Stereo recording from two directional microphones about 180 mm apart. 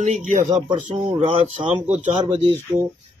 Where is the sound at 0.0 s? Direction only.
40° right (ahead or behind).